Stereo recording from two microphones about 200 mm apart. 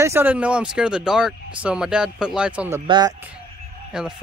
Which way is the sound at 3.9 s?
5° right (ahead or behind).